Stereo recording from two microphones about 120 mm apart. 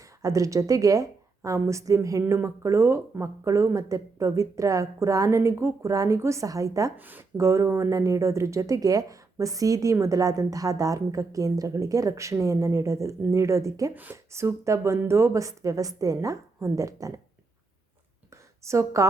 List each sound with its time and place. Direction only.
0.0 s speech: 25° right (ahead or behind)
6.9 s speech: 15° right (ahead or behind)
13.9 s speech: 15° right (ahead or behind)
18.6 s speech: 25° right (ahead or behind)